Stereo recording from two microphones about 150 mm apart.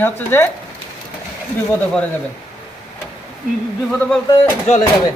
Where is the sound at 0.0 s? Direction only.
15° left (ahead or behind).